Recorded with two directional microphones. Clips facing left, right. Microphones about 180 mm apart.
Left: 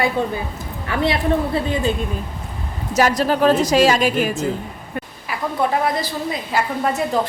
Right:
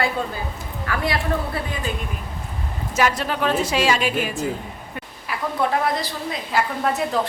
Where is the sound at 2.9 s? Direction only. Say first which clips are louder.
Left 5 dB; 40° left (ahead or behind).